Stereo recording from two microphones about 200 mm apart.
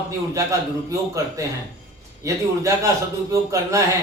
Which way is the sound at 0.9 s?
15° right (ahead or behind).